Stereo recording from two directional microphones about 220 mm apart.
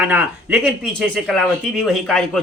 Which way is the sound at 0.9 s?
5° left (ahead or behind).